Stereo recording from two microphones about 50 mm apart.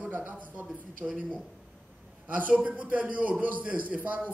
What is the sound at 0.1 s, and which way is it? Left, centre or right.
A man's voice, right.